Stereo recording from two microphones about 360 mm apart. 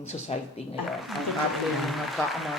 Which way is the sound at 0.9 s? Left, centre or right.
Centre.